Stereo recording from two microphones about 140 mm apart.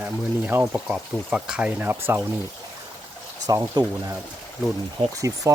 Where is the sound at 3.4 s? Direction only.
25° right (ahead or behind).